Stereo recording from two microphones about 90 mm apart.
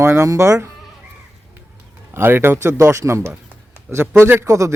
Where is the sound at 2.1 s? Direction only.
25° right (ahead or behind).